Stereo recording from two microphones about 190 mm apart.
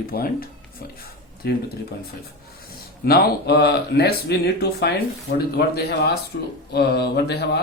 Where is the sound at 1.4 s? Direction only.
55° left (ahead or behind).